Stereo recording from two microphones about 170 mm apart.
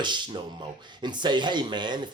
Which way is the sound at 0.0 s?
30° right (ahead or behind).